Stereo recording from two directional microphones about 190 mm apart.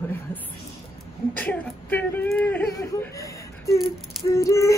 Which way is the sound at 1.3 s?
10° left (ahead or behind).